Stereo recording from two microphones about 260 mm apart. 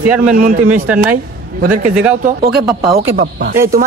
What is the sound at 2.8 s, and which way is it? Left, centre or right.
Speech, right.